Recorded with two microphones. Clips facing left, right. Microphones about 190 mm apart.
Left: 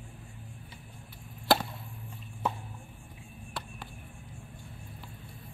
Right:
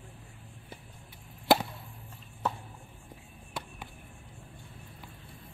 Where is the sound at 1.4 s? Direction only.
15° right (ahead or behind).